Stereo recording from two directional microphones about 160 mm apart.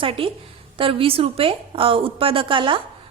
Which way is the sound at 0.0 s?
35° right (ahead or behind).